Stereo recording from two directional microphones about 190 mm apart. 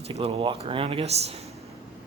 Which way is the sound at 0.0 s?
30° right (ahead or behind).